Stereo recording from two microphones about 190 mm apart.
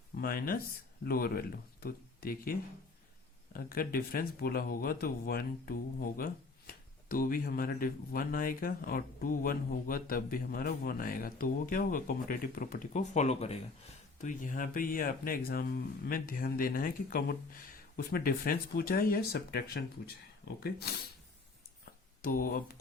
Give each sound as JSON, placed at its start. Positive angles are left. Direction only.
{"t": 0.2, "sound": "speech", "side_deg": 50}
{"t": 22.2, "sound": "speech", "side_deg": 50}